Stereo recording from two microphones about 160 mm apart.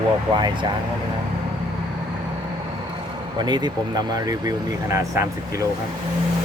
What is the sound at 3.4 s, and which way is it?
Speech, 25° right (ahead or behind).